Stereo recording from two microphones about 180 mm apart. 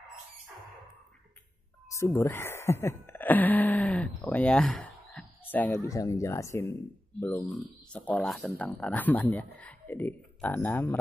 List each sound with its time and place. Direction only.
1.9 s a man's voice: 15° left (ahead or behind)
8.1 s a man's voice: 5° left (ahead or behind)